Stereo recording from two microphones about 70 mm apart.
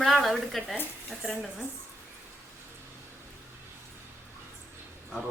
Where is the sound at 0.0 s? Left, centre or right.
Centre.